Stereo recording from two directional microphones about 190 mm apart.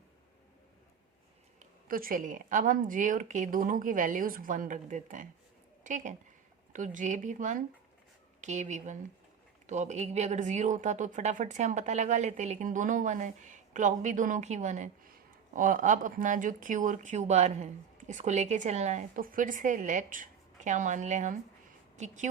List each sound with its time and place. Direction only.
1.9 s a woman's voice: 50° right (ahead or behind)